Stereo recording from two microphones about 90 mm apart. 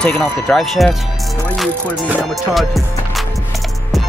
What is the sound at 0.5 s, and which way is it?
Speech, centre (ahead or behind).